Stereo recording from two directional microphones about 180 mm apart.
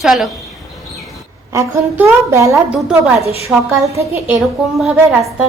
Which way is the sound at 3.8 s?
15° right (ahead or behind).